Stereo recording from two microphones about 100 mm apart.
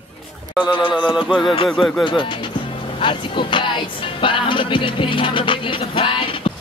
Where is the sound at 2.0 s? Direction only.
55° left (ahead or behind).